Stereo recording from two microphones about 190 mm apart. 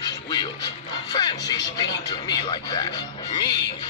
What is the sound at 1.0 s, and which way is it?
Speech, 20° left (ahead or behind).